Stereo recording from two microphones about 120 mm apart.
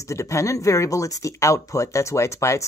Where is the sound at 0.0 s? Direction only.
25° left (ahead or behind).